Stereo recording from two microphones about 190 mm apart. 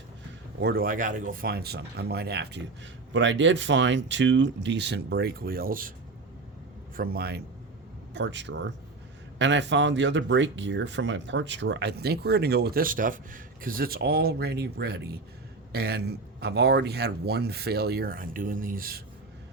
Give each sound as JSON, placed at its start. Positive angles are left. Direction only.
{"t": 0.6, "sound": "speech", "side_deg": -50}
{"t": 3.1, "sound": "speech", "side_deg": -75}
{"t": 6.9, "sound": "speech", "side_deg": -50}
{"t": 8.1, "sound": "speech", "side_deg": -70}